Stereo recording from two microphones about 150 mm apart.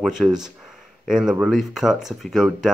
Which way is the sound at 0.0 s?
Centre (ahead or behind).